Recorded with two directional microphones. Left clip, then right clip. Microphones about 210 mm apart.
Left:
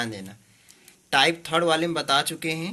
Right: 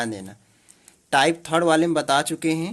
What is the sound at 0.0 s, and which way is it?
Speech, 50° right (ahead or behind).